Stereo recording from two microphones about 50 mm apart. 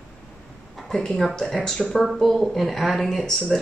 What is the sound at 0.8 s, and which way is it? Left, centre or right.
Speech, centre.